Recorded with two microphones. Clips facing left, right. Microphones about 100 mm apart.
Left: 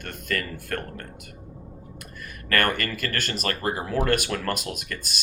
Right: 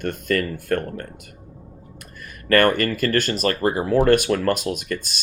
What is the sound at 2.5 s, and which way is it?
Speech, 30° right (ahead or behind).